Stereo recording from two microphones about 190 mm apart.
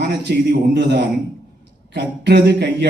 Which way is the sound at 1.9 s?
60° right (ahead or behind).